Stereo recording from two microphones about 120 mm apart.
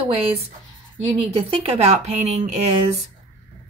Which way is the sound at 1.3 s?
50° right (ahead or behind).